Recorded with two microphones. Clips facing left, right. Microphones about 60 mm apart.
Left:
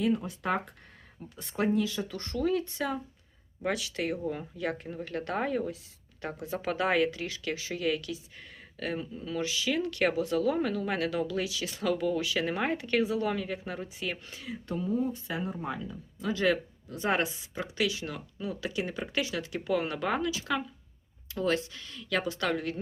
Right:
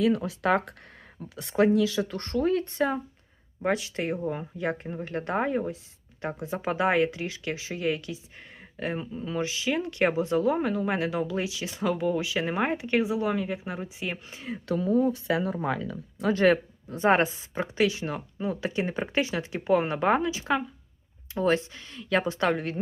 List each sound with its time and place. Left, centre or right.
0.0 s speech: right
1.2 s speech: right
2.0 s speech: right
14.7 s speech: right
16.2 s speech: right